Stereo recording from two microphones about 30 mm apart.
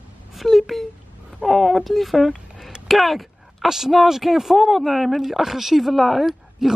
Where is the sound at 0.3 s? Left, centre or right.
Centre.